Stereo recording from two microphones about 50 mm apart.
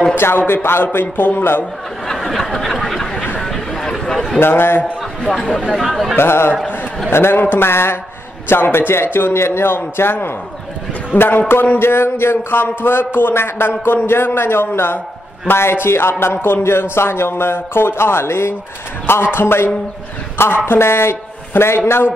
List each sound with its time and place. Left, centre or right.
0.1 s a man's voice: left
2.2 s a sound: centre
4.4 s a man's voice: left
5.2 s speech: centre
6.1 s a man's voice: left